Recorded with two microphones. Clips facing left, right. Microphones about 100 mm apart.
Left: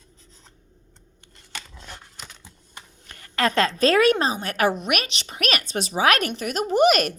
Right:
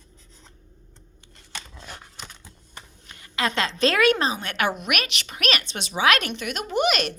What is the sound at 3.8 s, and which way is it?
A woman's voice, 40° left (ahead or behind).